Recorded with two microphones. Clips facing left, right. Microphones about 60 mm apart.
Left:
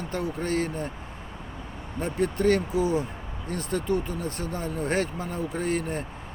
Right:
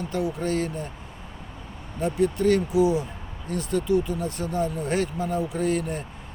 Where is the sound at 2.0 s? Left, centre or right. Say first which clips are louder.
Right 2 dB; left.